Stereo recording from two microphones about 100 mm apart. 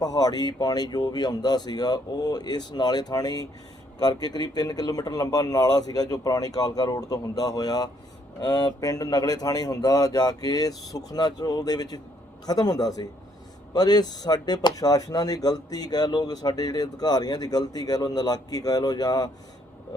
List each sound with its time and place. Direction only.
0.0 s speech: 40° left (ahead or behind)